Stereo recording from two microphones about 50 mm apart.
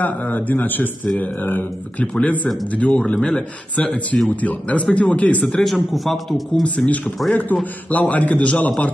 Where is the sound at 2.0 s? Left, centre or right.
Left.